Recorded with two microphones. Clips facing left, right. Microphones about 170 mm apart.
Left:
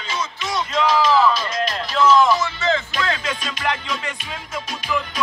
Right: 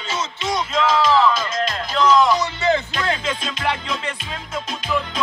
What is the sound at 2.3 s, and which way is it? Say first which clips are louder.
Music: right 1 dB; 20° right (ahead or behind).